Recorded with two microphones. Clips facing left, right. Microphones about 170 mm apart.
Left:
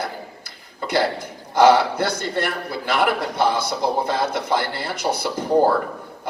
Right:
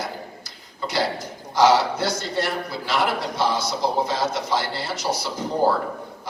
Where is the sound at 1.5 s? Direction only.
55° left (ahead or behind).